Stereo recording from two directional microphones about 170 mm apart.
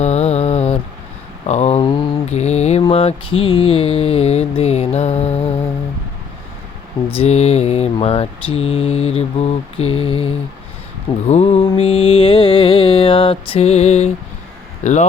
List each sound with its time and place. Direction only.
0.0 s mantra: 40° left (ahead or behind)
1.5 s a sound: 40° left (ahead or behind)
1.8 s mantra: 25° left (ahead or behind)
2.2 s mantra: 40° left (ahead or behind)
7.2 s mantra: 40° left (ahead or behind)
14.8 s speech: 40° left (ahead or behind)